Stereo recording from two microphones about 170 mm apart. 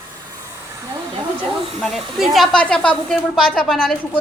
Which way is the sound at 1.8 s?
Centre (ahead or behind).